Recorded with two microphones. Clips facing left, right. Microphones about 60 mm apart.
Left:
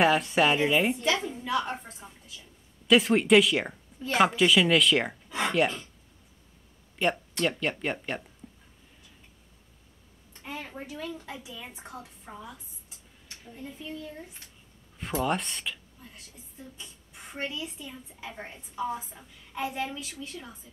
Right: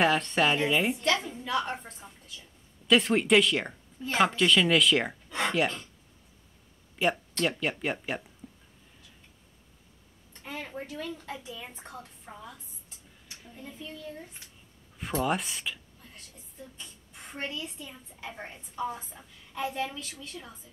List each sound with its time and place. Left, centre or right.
0.0 s speech: centre
7.0 s speech: centre
10.4 s speech: centre
11.2 s speech: centre
13.6 s a child's voice: centre
15.0 s speech: centre
19.5 s a woman's voice: centre
20.2 s speech: centre